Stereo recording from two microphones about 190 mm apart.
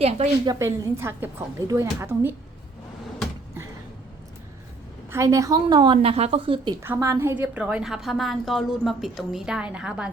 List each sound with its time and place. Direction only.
0.4 s a woman's voice: 15° right (ahead or behind)
5.1 s a woman's voice: 15° right (ahead or behind)
6.7 s a woman's voice: 10° right (ahead or behind)